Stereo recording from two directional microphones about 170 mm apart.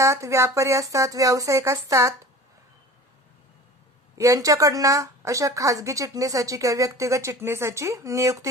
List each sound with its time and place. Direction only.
0.0 s speech: 15° right (ahead or behind)
4.1 s a woman's voice: 20° right (ahead or behind)